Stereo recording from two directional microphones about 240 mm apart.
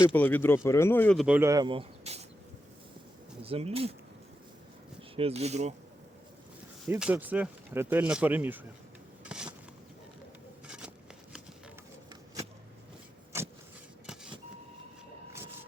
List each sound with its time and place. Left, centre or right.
0.0 s speech: centre; by 2.2 s right
3.4 s speech: right
5.1 s speech: right
6.8 s speech: centre
9.2 s a sound: centre
10.7 s a sound: centre
13.3 s vehicle: centre